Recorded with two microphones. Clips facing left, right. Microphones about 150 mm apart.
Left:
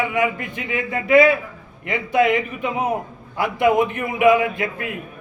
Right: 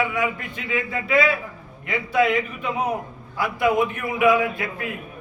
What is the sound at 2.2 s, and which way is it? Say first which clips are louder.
A man's voice: left 2 dB; 20° left (ahead or behind).